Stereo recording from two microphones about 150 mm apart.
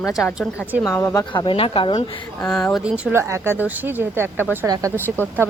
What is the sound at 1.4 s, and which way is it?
Speech, 35° left (ahead or behind).